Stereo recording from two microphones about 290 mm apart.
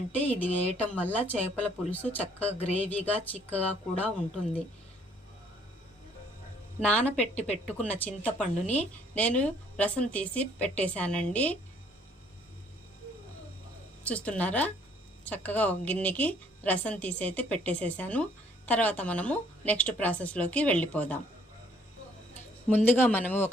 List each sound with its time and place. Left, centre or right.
0.2 s a man's voice: centre
7.0 s a woman's voice: centre
7.4 s speech: left
7.8 s a woman's voice: centre
14.0 s a woman's voice: centre
22.7 s a man's voice: centre